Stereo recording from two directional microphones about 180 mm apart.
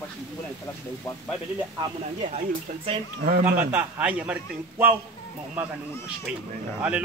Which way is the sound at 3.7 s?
10° right (ahead or behind).